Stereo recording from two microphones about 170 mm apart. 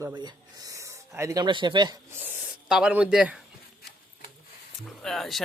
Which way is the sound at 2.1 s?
10° right (ahead or behind).